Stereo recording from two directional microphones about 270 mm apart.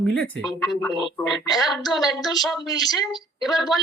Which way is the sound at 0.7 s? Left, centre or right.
Centre.